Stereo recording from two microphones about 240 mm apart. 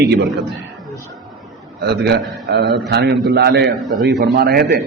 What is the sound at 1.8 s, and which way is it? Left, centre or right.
A man's voice, right.